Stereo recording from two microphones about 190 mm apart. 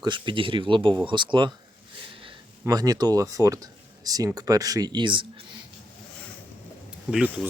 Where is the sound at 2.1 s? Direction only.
25° right (ahead or behind).